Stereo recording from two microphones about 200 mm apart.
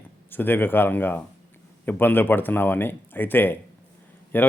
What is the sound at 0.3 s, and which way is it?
Speech, 10° left (ahead or behind).